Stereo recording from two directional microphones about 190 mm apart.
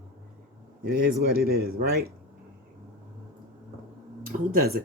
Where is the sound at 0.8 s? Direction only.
55° right (ahead or behind).